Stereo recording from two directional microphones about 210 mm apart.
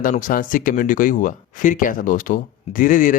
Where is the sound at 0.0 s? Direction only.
40° left (ahead or behind).